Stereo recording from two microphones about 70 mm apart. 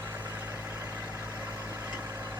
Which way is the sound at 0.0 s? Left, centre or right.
Right.